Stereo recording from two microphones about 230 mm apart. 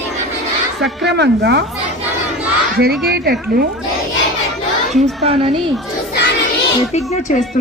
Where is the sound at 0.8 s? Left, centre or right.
Right.